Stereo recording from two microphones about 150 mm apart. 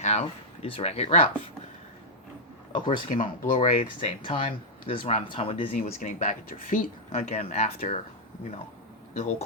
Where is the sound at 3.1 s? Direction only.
55° left (ahead or behind).